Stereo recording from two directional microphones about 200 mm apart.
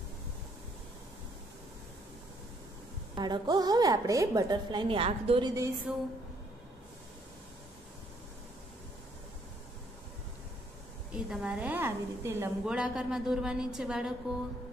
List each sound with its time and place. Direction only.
3.2 s a woman's voice: 20° right (ahead or behind)
5.9 s a woman's voice: 5° right (ahead or behind)
11.1 s a woman's voice: 5° right (ahead or behind)